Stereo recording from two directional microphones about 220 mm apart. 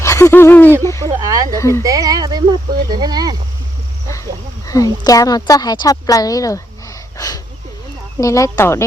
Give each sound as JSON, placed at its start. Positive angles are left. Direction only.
{"t": 0.0, "sound": "owl", "side_deg": 15}
{"t": 0.9, "sound": "speech", "side_deg": 15}
{"t": 1.2, "sound": "speech", "side_deg": -15}
{"t": 1.5, "sound": "speech", "side_deg": 15}
{"t": 1.8, "sound": "speech", "side_deg": -15}
{"t": 4.1, "sound": "speech", "side_deg": 15}